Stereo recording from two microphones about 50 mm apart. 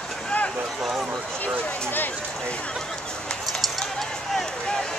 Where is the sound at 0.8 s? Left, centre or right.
Centre.